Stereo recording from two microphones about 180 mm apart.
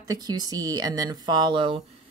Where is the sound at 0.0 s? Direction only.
20° right (ahead or behind).